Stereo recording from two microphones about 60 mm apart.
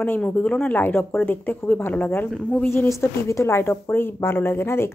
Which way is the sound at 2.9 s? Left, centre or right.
Left.